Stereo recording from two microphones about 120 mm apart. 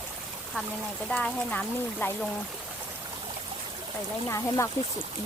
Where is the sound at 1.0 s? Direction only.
5° left (ahead or behind).